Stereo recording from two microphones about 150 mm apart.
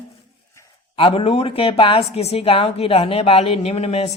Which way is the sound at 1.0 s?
35° left (ahead or behind).